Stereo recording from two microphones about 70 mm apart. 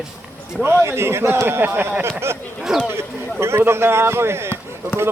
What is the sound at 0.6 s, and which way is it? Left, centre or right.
Speech, right.